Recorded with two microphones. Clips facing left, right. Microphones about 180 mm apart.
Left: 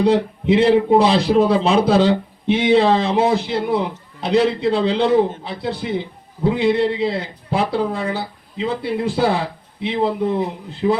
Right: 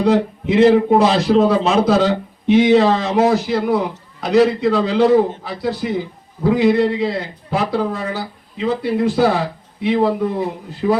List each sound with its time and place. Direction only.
0.0 s a man's voice: 30° left (ahead or behind)